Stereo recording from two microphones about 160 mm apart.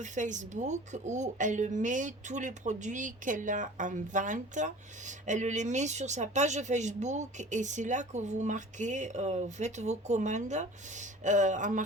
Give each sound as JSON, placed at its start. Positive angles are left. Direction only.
{"t": 0.0, "sound": "a woman's voice", "side_deg": -50}